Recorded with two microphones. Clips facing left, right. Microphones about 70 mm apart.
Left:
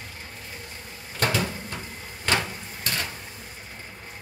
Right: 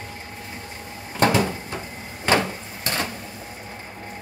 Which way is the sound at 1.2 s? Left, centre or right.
Right.